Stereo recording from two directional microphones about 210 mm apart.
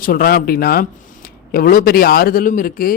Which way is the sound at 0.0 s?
45° left (ahead or behind).